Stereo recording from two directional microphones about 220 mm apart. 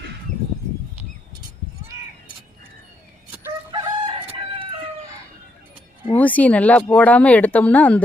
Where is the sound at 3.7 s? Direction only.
20° right (ahead or behind).